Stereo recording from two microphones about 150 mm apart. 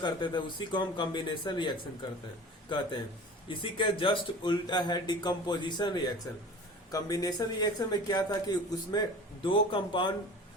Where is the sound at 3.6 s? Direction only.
35° left (ahead or behind).